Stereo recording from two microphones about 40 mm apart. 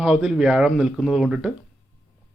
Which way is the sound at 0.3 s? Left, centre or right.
Centre.